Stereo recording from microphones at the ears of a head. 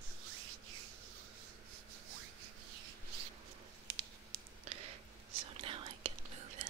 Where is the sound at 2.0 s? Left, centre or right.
Right.